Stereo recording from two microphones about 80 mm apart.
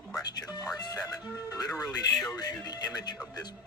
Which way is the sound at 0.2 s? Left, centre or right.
Left.